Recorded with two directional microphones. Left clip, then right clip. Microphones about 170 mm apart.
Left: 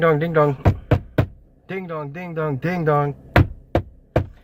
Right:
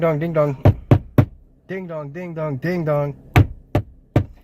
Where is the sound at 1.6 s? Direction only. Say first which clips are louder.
Even; 15° right (ahead or behind).